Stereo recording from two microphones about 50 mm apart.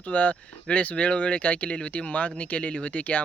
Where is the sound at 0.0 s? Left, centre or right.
Left.